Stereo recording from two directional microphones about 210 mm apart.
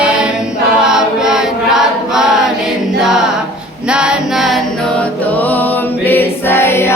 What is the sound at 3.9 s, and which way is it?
Female singing, 5° right (ahead or behind).